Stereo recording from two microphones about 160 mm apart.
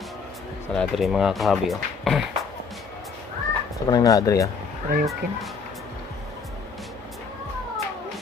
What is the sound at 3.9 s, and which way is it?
Speech, 20° left (ahead or behind).